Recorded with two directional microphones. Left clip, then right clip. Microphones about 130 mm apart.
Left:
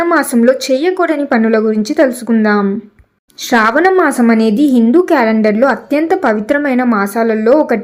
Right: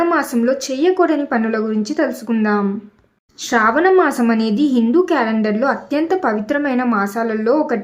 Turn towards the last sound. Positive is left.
turn(degrees=30)  # may be behind; listen again after turning